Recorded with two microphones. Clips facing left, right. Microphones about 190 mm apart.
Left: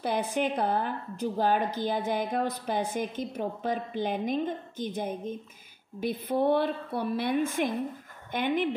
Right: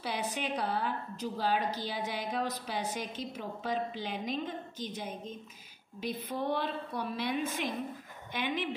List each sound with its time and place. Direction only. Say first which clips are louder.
0.0 s a woman's voice: left 7 dB; 50° left (ahead or behind)